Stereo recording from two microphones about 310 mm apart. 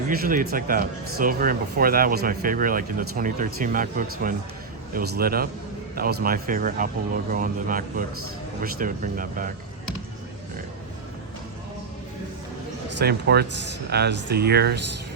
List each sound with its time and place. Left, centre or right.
0.1 s speech: right
13.0 s speech: right